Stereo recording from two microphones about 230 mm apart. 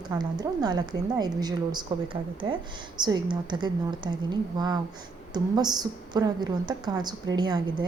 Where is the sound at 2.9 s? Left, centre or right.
Centre.